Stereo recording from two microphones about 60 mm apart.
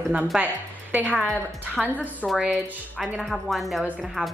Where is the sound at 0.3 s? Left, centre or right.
Centre.